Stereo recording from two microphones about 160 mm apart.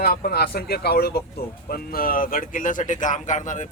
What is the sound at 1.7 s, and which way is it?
Speech, 65° left (ahead or behind).